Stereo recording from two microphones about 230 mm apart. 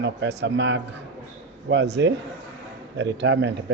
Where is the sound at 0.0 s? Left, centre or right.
Right.